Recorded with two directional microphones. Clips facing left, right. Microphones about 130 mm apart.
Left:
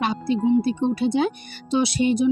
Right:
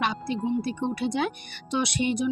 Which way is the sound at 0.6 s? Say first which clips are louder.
Left 6 dB; 30° left (ahead or behind).